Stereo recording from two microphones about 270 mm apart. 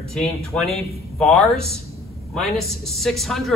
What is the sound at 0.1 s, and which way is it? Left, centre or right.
Speech, centre.